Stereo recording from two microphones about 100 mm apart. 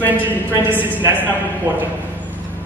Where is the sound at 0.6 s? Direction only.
20° right (ahead or behind).